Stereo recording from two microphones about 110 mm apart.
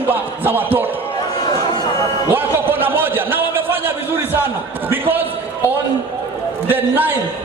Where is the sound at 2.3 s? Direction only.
20° right (ahead or behind).